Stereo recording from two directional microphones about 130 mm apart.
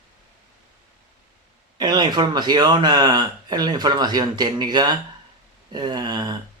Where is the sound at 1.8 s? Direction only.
35° right (ahead or behind).